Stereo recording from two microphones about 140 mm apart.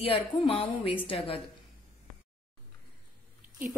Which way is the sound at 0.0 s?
40° left (ahead or behind).